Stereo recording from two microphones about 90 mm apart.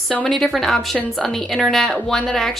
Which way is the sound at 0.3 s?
Centre (ahead or behind).